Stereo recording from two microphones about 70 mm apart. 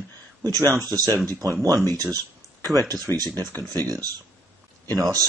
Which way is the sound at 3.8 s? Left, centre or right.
Right.